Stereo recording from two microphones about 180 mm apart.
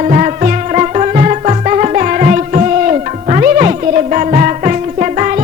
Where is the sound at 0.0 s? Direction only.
45° right (ahead or behind).